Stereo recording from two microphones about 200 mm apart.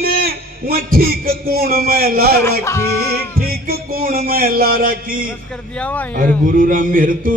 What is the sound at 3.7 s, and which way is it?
A man's voice, 50° right (ahead or behind).